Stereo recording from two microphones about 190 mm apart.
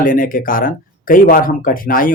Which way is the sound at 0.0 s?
45° left (ahead or behind).